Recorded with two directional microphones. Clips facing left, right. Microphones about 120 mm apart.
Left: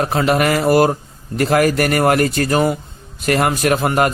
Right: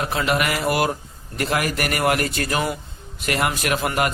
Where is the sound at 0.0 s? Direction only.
40° left (ahead or behind).